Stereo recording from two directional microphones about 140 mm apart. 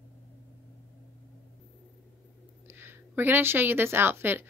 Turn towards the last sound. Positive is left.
turn(degrees=-15)  # may be behind; listen again after turning